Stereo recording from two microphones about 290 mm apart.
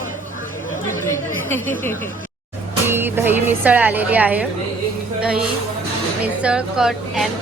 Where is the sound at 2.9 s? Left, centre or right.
Centre.